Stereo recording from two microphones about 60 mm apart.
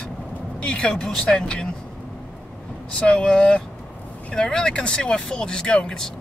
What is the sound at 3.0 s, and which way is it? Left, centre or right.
Speech, left.